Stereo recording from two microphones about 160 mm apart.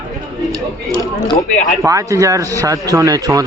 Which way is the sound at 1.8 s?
20° right (ahead or behind).